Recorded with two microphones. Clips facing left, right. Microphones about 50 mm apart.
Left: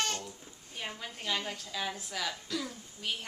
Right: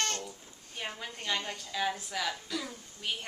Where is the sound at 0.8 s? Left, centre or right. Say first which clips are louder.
Right 1 dB; centre.